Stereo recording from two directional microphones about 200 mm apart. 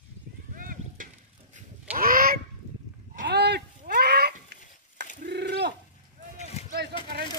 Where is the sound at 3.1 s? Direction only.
50° right (ahead or behind).